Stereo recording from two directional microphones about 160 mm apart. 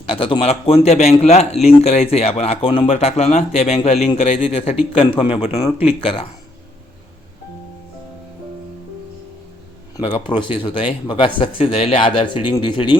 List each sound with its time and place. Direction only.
0.0 s speech: 35° left (ahead or behind)
10.0 s speech: 30° left (ahead or behind)